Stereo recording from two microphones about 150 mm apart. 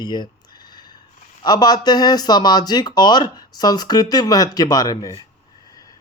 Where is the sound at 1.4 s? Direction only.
25° left (ahead or behind).